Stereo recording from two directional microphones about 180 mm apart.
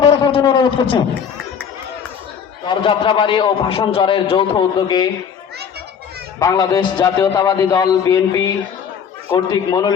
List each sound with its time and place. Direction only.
0.0 s a sound: 30° left (ahead or behind)
2.6 s a man's voice: 30° left (ahead or behind)
6.4 s a man's voice: 20° left (ahead or behind)